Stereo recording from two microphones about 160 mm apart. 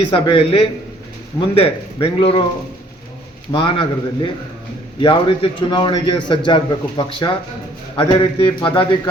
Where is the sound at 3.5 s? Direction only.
30° left (ahead or behind).